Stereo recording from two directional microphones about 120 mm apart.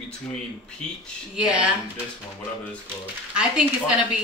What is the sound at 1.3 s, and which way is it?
Speech, 10° right (ahead or behind).